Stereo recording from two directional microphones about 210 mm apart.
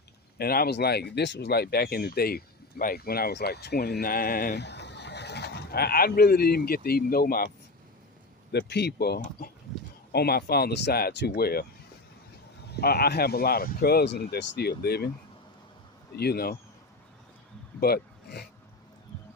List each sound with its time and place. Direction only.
0.3 s speech: 45° left (ahead or behind)
8.5 s speech: 50° left (ahead or behind)
12.7 s speech: 50° left (ahead or behind)
16.1 s speech: 50° left (ahead or behind)
17.7 s a sound: 50° left (ahead or behind)